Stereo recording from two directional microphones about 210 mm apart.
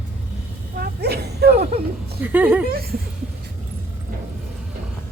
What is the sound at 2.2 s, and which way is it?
Speech, 10° right (ahead or behind).